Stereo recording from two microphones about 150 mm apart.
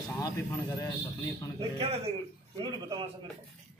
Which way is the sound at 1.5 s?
40° right (ahead or behind).